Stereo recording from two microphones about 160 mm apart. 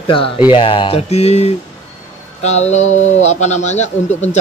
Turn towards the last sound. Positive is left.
turn(degrees=45)  # may be behind; listen again after turning